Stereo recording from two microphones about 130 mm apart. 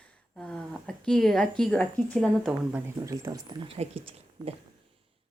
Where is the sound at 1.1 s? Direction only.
5° left (ahead or behind).